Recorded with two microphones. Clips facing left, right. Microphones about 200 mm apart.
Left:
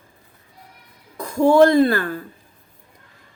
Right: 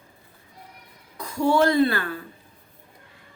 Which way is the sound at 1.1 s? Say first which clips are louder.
Left 7 dB; 50° left (ahead or behind).